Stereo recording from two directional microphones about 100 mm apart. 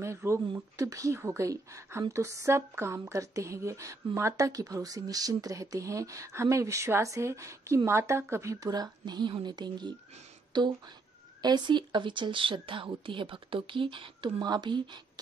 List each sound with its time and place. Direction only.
0.0 s speech: 25° right (ahead or behind); by 15.0 s 50° right (ahead or behind)